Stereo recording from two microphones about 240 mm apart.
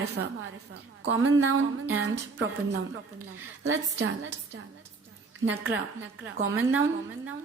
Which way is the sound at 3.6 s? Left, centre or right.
Right.